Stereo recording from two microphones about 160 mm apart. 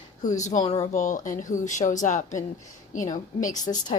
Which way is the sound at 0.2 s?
50° left (ahead or behind).